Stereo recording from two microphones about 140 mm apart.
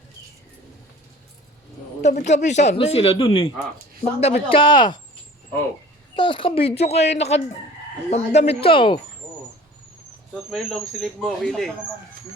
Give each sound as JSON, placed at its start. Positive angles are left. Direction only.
{"t": 2.0, "sound": "speech", "side_deg": 55}
{"t": 2.7, "sound": "speech", "side_deg": 40}
{"t": 6.1, "sound": "speech", "side_deg": 35}
{"t": 10.5, "sound": "speech", "side_deg": 0}